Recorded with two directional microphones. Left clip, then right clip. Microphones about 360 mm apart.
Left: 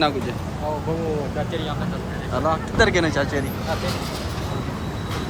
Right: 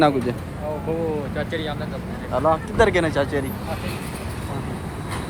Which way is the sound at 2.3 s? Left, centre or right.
Centre.